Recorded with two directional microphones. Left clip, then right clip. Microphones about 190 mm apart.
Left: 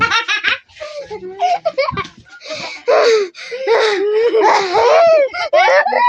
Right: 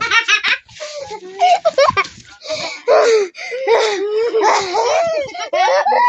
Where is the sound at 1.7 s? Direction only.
35° right (ahead or behind).